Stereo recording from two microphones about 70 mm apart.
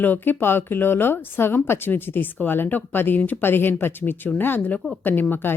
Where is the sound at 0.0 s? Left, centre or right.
Left.